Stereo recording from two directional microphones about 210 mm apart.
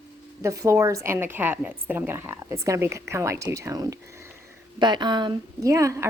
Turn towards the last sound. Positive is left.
turn(degrees=-15)  # may be behind; listen again after turning